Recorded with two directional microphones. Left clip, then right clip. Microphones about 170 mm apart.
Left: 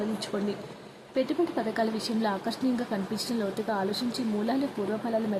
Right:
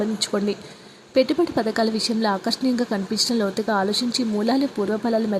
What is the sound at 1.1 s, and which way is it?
A woman's voice, 30° right (ahead or behind).